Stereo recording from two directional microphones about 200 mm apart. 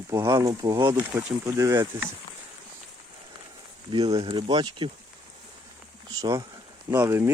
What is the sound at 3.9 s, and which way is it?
Speech, 25° right (ahead or behind).